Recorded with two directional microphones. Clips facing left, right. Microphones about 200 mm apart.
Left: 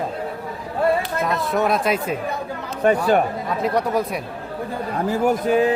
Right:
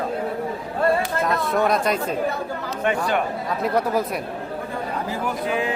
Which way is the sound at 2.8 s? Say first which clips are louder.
Left 6 dB; 40° left (ahead or behind).